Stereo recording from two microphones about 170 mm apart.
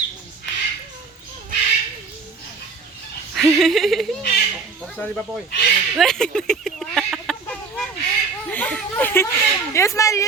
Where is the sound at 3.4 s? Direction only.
Centre (ahead or behind).